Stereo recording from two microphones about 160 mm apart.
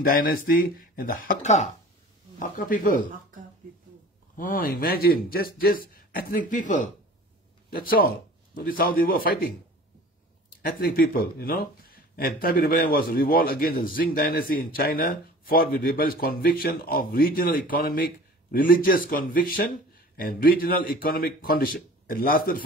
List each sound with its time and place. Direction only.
0.0 s speech: 65° left (ahead or behind); by 1.7 s 50° left (ahead or behind)
2.3 s speech: 60° left (ahead or behind)
4.4 s speech: 60° left (ahead or behind)
7.7 s speech: 65° left (ahead or behind)
10.8 s speech: 65° left (ahead or behind)